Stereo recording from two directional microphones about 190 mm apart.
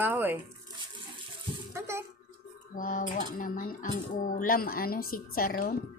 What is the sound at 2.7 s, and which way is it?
Speech, 45° left (ahead or behind).